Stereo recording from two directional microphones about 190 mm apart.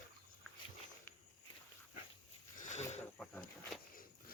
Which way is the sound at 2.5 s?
40° left (ahead or behind).